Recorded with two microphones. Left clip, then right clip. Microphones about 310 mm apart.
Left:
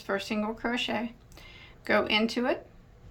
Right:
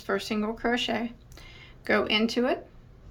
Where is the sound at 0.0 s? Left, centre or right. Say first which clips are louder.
Right 2 dB; centre.